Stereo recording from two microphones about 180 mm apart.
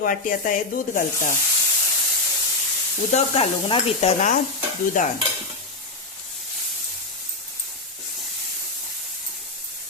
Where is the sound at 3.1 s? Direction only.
35° left (ahead or behind).